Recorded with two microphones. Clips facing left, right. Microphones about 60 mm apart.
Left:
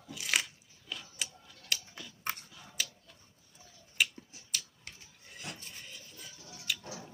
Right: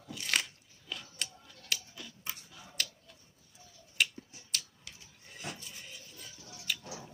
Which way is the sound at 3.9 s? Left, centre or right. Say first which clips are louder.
Even; centre.